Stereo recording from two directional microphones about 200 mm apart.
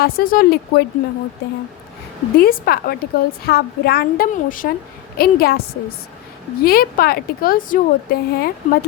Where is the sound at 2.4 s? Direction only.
50° left (ahead or behind).